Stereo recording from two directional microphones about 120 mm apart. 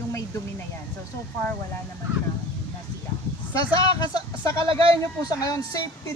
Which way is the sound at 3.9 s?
35° left (ahead or behind).